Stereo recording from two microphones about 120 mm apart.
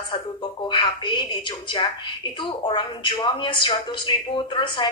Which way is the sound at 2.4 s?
45° left (ahead or behind).